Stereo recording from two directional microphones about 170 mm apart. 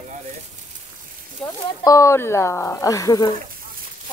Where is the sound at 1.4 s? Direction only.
20° left (ahead or behind).